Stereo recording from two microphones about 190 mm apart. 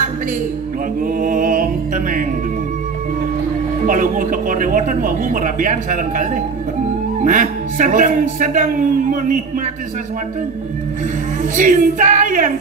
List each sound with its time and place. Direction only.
1.2 s speech: 45° right (ahead or behind)
3.8 s speech: 45° right (ahead or behind)
11.5 s speech: 45° right (ahead or behind)